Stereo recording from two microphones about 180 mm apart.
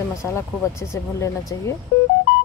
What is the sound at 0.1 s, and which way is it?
Speech, 15° left (ahead or behind).